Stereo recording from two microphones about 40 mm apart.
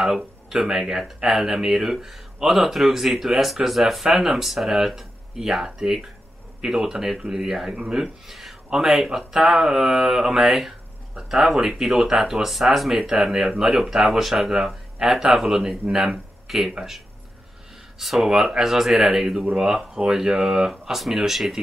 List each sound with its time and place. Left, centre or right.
0.0 s speech: centre
17.9 s speech: centre
18.2 s speech: centre